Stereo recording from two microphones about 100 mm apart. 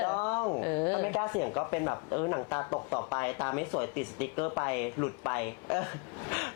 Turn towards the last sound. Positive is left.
turn(degrees=20)  # may be behind; listen again after turning